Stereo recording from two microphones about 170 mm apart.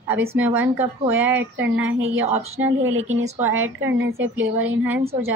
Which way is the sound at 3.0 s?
40° right (ahead or behind).